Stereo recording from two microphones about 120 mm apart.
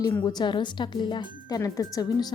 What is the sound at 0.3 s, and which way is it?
Speech, 35° left (ahead or behind).